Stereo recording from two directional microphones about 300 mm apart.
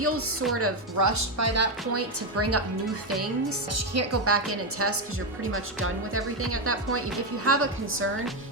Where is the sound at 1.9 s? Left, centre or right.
Right.